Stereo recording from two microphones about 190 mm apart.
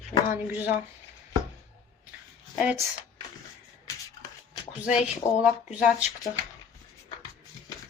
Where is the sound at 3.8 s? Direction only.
20° left (ahead or behind).